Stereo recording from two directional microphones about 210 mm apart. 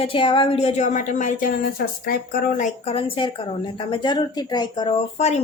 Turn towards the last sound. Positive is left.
turn(degrees=30)  # may be behind; listen again after turning